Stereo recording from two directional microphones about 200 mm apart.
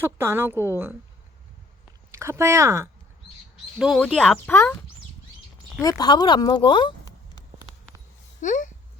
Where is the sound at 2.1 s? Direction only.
15° right (ahead or behind).